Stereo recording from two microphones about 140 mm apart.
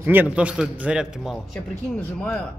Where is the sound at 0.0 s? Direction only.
15° right (ahead or behind).